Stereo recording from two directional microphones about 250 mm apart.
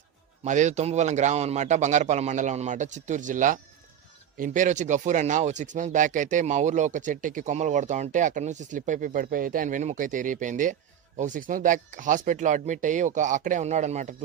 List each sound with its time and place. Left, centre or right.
0.4 s a man's voice: right